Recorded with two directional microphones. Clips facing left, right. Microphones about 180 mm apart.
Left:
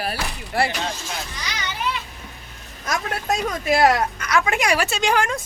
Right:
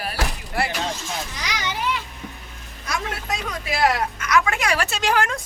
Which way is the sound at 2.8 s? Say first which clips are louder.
Left 4 dB; 45° left (ahead or behind).